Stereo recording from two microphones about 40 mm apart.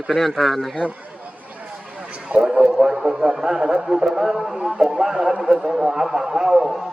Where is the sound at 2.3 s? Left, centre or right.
Right.